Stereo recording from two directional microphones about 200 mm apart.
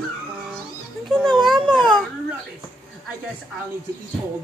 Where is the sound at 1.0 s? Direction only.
Centre (ahead or behind).